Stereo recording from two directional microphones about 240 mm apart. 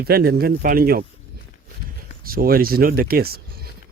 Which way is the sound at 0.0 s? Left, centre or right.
Right.